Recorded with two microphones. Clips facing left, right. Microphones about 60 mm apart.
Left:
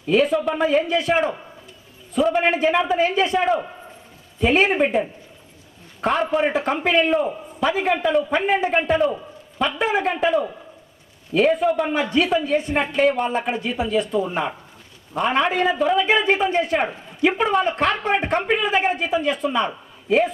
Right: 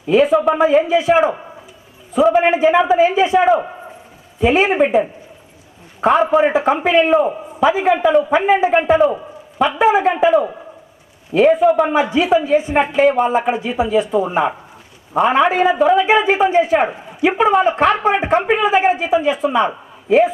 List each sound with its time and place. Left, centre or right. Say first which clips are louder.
0.1 s a woman's voice: right 6 dB; centre
3.6 s a sound: right 6 dB; right
4.4 s a woman's voice: right 4 dB; centre